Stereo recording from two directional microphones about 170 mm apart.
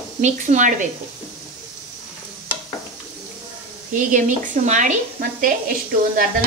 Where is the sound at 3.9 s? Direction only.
50° right (ahead or behind).